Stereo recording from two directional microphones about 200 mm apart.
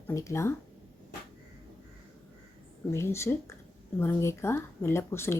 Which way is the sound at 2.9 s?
15° left (ahead or behind).